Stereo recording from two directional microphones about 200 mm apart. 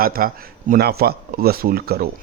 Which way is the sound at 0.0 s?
45° right (ahead or behind).